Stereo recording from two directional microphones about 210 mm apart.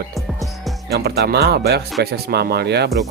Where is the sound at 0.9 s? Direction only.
50° right (ahead or behind).